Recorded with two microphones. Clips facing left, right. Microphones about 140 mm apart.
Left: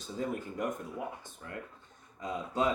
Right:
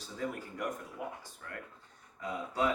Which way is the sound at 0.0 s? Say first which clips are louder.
Left 3 dB; 25° left (ahead or behind).